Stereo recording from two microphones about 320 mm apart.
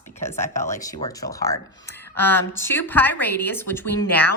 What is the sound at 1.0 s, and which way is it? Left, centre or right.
Speech, centre.